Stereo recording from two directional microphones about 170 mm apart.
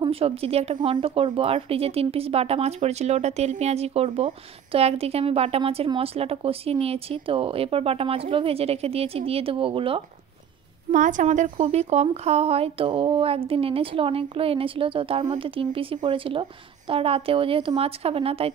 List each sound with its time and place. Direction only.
0.0 s speech: 35° right (ahead or behind)
10.9 s a woman's voice: 50° right (ahead or behind)
11.5 s speech: 35° right (ahead or behind)